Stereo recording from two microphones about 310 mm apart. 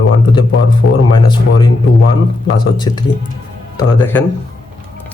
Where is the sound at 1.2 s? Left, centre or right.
Centre.